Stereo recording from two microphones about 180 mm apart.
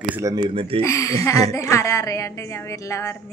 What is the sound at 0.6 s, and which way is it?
Speech, 30° right (ahead or behind).